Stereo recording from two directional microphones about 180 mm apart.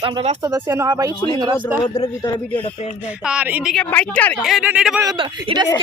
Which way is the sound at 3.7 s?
5° left (ahead or behind).